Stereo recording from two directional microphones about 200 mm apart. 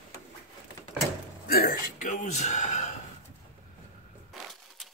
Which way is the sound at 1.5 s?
45° left (ahead or behind).